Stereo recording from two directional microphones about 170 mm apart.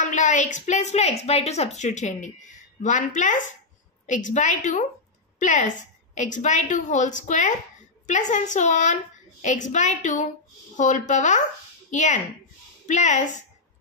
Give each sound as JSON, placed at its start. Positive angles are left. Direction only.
{"t": 0.0, "sound": "a woman's voice", "side_deg": 50}